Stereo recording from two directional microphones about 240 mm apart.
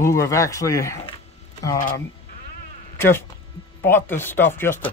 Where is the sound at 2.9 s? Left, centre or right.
Centre.